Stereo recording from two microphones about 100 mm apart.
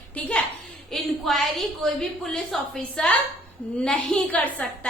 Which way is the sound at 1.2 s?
5° left (ahead or behind).